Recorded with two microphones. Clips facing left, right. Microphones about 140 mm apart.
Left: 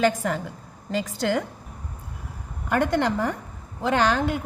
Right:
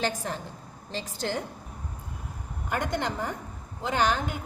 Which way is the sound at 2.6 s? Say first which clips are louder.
Left 7 dB; 70° left (ahead or behind).